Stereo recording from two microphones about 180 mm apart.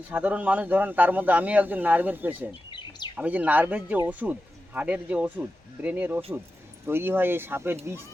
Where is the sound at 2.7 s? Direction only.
25° left (ahead or behind).